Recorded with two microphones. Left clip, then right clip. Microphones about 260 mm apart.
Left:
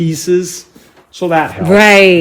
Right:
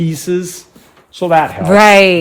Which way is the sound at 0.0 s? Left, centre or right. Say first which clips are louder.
Left 4 dB; right.